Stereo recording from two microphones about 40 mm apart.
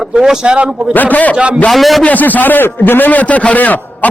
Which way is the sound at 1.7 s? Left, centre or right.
Centre.